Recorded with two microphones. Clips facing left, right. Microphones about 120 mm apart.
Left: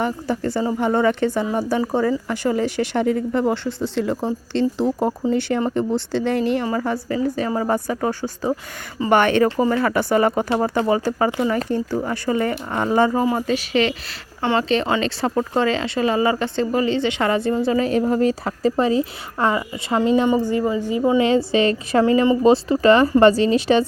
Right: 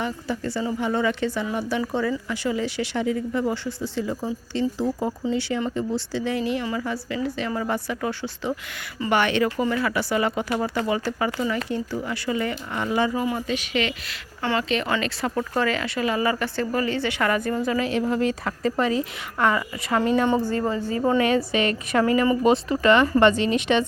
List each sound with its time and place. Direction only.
0.0 s a woman's voice: 50° left (ahead or behind)
1.5 s a woman's voice: 35° left (ahead or behind); by 3.8 s 65° left (ahead or behind)
3.9 s speech: 75° left (ahead or behind)
5.2 s a woman's voice: 50° left (ahead or behind)
10.6 s a woman's voice: 35° left (ahead or behind); by 21.0 s 15° left (ahead or behind)
21.2 s speech: 25° left (ahead or behind)